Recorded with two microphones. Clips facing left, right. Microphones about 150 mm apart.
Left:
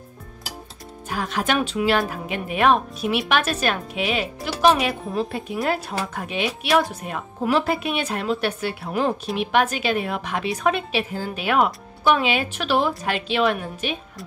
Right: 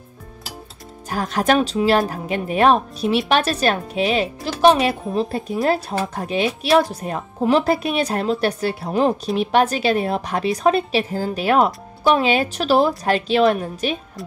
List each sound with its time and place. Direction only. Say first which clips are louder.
1.1 s a woman's voice: right 5 dB; 40° right (ahead or behind)